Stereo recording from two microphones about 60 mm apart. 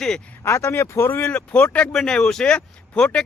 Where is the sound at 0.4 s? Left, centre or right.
Left.